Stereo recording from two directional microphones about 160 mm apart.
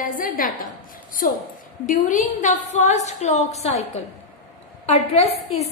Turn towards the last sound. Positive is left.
turn(degrees=40)  # may be behind; listen again after turning